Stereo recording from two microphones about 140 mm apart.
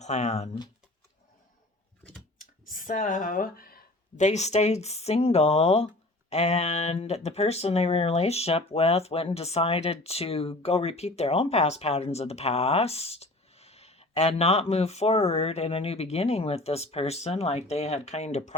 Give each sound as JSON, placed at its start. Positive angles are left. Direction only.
{"t": 0.0, "sound": "speech", "side_deg": 55}
{"t": 2.4, "sound": "a sound", "side_deg": 75}
{"t": 4.3, "sound": "speech", "side_deg": 55}